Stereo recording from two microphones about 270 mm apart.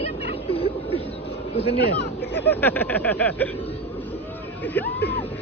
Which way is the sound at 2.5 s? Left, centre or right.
Centre.